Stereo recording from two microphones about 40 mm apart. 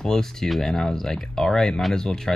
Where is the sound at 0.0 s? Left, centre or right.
Centre.